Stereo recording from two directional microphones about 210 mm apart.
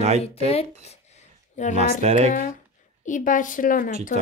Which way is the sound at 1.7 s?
30° right (ahead or behind).